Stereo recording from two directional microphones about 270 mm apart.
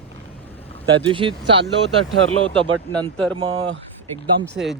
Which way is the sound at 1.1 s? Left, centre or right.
Centre.